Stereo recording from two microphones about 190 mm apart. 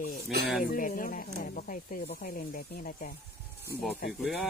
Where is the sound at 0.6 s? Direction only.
45° left (ahead or behind).